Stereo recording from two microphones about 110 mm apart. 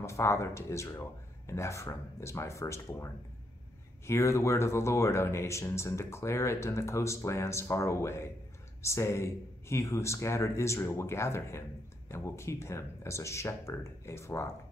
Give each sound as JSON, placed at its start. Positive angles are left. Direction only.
{"t": 0.0, "sound": "speech", "side_deg": 25}
{"t": 4.1, "sound": "speech", "side_deg": 25}